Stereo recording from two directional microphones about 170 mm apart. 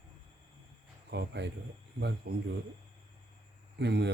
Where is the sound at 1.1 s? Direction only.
90° right.